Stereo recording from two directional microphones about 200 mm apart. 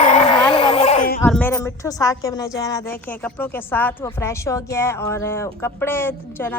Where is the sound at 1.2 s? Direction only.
10° left (ahead or behind).